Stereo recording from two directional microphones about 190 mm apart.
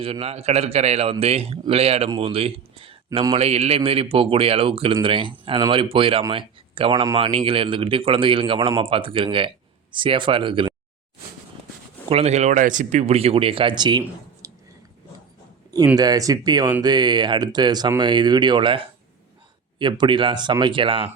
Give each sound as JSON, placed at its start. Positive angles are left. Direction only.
{"t": 0.0, "sound": "speech", "side_deg": -30}
{"t": 12.0, "sound": "speech", "side_deg": -35}
{"t": 14.4, "sound": "chewing", "side_deg": -15}
{"t": 16.0, "sound": "speech", "side_deg": -20}